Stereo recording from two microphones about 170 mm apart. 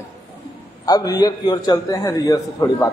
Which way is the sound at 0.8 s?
20° left (ahead or behind).